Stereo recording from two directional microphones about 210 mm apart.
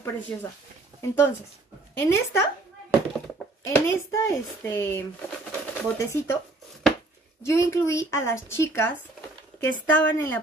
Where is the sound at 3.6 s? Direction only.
15° left (ahead or behind).